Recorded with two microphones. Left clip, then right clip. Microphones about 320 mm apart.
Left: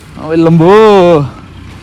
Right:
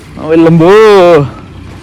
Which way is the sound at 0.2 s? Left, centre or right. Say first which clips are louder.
Right 3 dB; centre.